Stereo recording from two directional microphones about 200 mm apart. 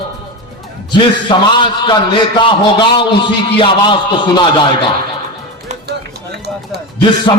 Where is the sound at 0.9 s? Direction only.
25° left (ahead or behind).